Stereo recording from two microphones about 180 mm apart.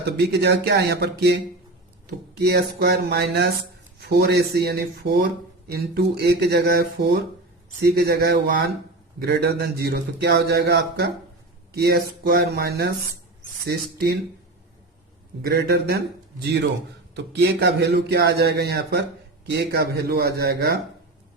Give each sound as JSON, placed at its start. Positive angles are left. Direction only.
{"t": 0.0, "sound": "speech", "side_deg": -65}
{"t": 15.4, "sound": "speech", "side_deg": -55}
{"t": 17.3, "sound": "speech", "side_deg": -65}